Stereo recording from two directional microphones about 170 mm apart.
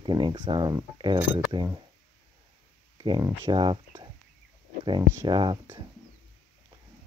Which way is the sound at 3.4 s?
25° right (ahead or behind).